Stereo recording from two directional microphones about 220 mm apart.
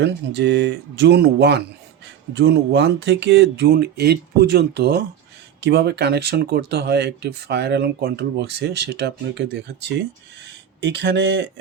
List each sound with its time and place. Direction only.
0.0 s speech: 50° right (ahead or behind)
10.8 s speech: 50° right (ahead or behind)